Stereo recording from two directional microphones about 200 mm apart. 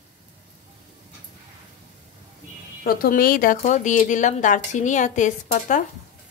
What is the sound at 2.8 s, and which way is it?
Speech, 50° left (ahead or behind).